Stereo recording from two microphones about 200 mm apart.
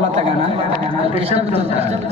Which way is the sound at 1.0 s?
30° right (ahead or behind).